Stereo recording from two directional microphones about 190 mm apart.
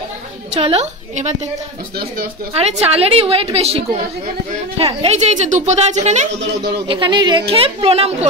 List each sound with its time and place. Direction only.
0.6 s a woman's voice: 30° right (ahead or behind)
2.5 s a woman's voice: 30° right (ahead or behind)
6.9 s a woman's voice: 25° right (ahead or behind)